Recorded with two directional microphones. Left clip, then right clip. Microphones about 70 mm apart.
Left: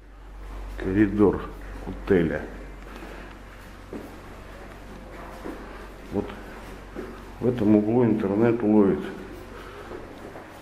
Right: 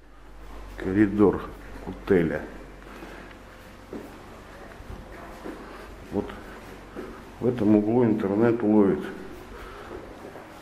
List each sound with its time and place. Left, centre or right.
0.7 s a man's voice: centre
6.1 s speech: right
7.4 s a man's voice: centre